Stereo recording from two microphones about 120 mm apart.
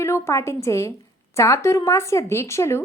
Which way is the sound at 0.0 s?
25° left (ahead or behind).